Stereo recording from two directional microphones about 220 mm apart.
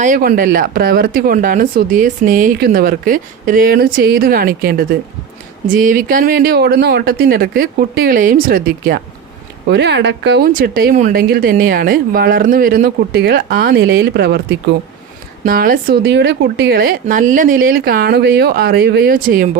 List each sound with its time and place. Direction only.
0.0 s a woman's voice: 40° right (ahead or behind)
15.4 s speech: 40° right (ahead or behind)